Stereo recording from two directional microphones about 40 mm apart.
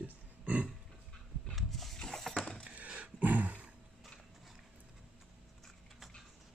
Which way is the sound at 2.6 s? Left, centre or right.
Right.